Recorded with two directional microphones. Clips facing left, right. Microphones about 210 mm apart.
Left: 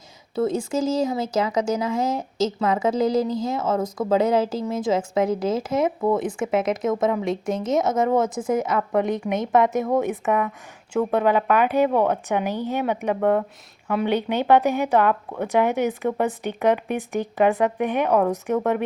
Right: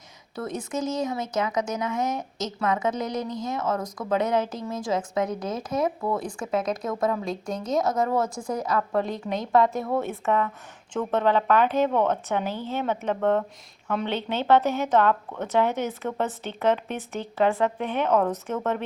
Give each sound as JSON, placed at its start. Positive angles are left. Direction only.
{"t": 0.3, "sound": "speech", "side_deg": 25}